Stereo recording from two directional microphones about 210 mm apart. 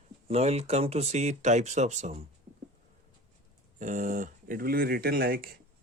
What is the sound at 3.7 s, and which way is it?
Speech, 35° right (ahead or behind).